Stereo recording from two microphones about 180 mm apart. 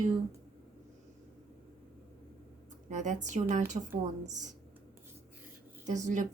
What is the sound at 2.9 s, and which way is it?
A woman's voice, 40° right (ahead or behind).